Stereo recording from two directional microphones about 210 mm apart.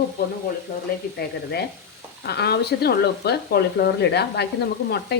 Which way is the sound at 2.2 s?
50° left (ahead or behind).